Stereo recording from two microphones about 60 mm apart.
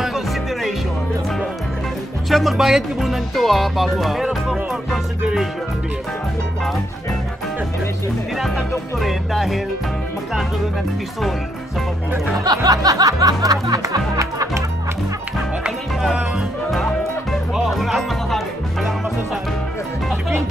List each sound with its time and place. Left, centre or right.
0.0 s music: centre
2.2 s speech: centre
8.4 s speech: centre
12.4 s music: right
17.6 s music: centre